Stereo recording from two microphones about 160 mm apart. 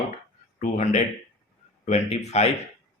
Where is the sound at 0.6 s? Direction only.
45° left (ahead or behind).